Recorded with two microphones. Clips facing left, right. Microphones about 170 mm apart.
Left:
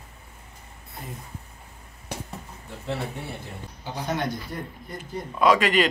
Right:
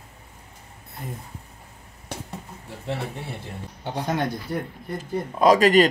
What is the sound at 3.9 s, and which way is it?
Speech, 60° right (ahead or behind).